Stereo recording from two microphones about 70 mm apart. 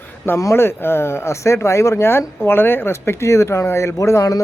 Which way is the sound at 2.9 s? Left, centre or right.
Left.